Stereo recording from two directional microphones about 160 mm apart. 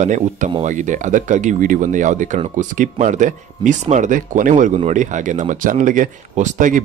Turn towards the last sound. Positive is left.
turn(degrees=-55)  # may be behind; listen again after turning